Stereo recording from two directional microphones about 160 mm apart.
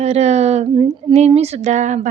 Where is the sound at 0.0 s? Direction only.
45° right (ahead or behind).